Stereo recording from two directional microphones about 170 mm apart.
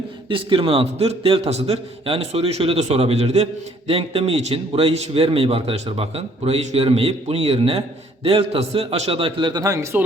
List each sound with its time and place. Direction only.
0.3 s a man's voice: 30° right (ahead or behind)